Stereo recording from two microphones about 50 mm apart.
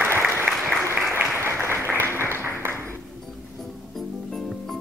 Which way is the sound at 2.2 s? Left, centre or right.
Right.